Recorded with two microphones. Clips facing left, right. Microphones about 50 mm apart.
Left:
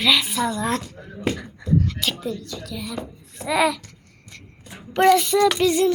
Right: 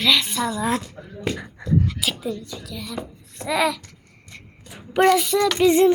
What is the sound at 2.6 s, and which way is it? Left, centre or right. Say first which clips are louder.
A child's voice: left 1 dB; centre.